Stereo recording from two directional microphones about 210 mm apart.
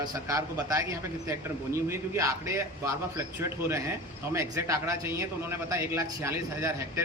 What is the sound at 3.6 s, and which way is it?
A man's voice, 10° right (ahead or behind).